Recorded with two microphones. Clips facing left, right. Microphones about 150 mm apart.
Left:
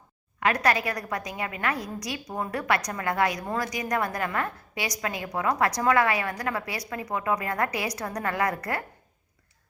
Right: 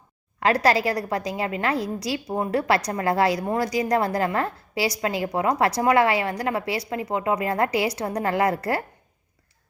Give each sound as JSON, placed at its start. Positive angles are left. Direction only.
{"t": 0.3, "sound": "a woman's voice", "side_deg": -30}